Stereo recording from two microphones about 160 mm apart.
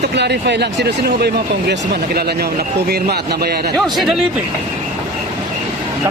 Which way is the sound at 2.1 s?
75° right (ahead or behind).